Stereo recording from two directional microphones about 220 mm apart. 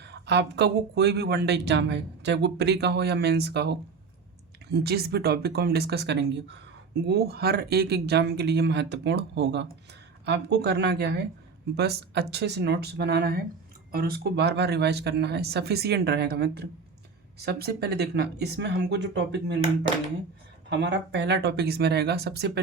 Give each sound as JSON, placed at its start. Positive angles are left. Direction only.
{"t": 0.0, "sound": "speech", "side_deg": -50}
{"t": 20.7, "sound": "speech", "side_deg": -50}